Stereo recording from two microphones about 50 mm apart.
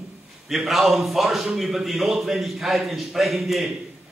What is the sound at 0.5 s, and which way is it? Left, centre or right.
A man's voice, centre.